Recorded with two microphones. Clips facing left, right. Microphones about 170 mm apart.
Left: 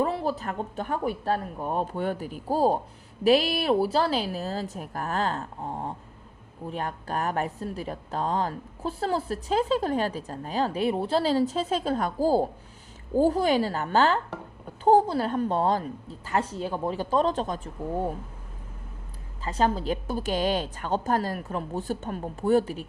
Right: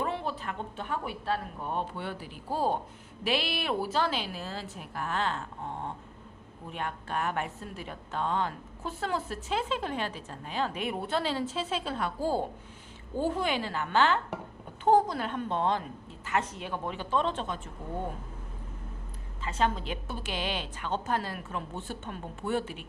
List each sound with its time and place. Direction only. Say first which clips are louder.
0.0 s a woman's voice: left 6 dB; 35° left (ahead or behind)
19.5 s a woman's voice: left 5 dB; 35° left (ahead or behind)